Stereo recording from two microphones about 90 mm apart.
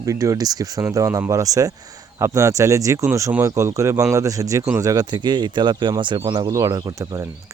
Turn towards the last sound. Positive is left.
turn(degrees=-45)  # may be behind; listen again after turning